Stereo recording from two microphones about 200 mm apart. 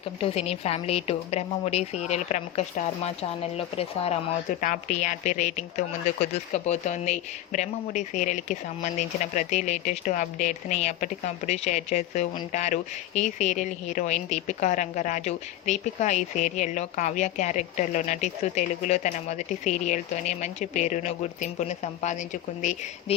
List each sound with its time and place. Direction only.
0.2 s speech: 30° left (ahead or behind)